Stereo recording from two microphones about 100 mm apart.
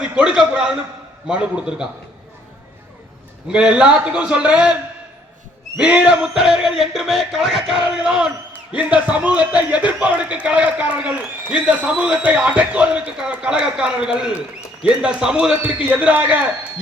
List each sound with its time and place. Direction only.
0.0 s speech: 10° right (ahead or behind)
3.5 s speech: 5° right (ahead or behind)
5.8 s a sound: 10° right (ahead or behind)
8.7 s speech: 15° right (ahead or behind)